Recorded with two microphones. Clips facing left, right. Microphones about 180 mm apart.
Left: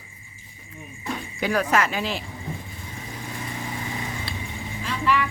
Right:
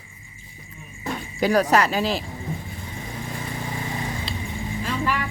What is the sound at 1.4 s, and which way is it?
Speech, 40° right (ahead or behind).